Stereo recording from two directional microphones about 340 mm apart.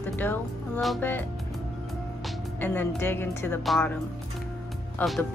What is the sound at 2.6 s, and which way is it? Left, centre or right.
A woman's voice, centre.